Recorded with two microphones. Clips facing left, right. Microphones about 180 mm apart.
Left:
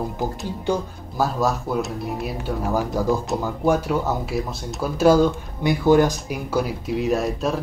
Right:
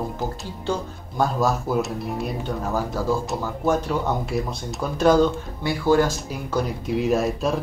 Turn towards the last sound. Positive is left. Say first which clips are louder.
# even
turn(degrees=0)  # may be behind; listen again after turning